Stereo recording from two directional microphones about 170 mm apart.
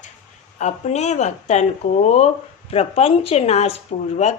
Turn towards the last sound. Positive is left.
turn(degrees=40)  # may be behind; listen again after turning